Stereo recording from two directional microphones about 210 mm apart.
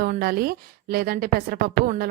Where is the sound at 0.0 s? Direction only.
45° right (ahead or behind).